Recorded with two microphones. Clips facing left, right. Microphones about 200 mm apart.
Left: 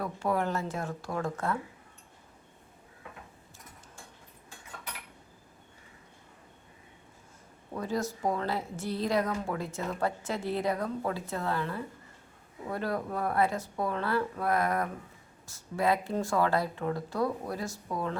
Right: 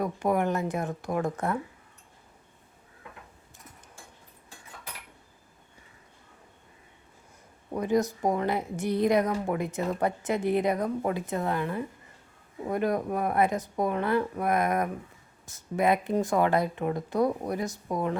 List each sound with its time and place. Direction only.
0.0 s speech: 15° right (ahead or behind)
7.7 s speech: 20° right (ahead or behind)